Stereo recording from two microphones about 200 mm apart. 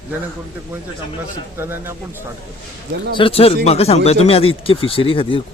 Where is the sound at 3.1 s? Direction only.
30° left (ahead or behind).